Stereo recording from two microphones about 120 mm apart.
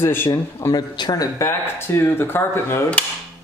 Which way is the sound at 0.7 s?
35° left (ahead or behind).